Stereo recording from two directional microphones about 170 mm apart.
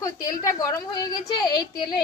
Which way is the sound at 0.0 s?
20° left (ahead or behind).